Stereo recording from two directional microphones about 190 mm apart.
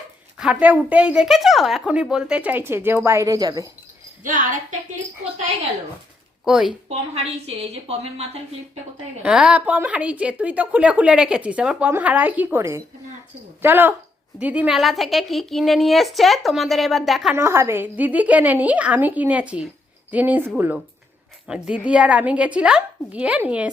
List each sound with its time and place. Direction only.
0.3 s a woman's voice: 5° right (ahead or behind)
4.2 s a woman's voice: 45° right (ahead or behind)
6.4 s a woman's voice: centre (ahead or behind)
6.8 s a woman's voice: 35° right (ahead or behind)
9.2 s a woman's voice: 5° right (ahead or behind)
17.3 s a woman's voice: 15° right (ahead or behind)